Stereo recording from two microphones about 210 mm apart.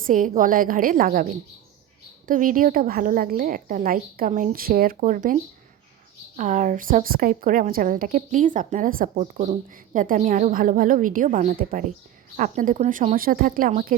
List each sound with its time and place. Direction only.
0.1 s a woman's voice: 40° right (ahead or behind)